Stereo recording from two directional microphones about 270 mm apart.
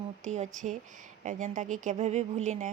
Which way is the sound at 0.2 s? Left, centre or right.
Right.